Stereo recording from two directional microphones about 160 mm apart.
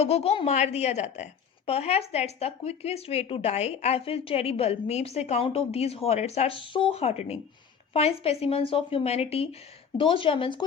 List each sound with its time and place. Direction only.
0.0 s a woman's voice: 40° left (ahead or behind)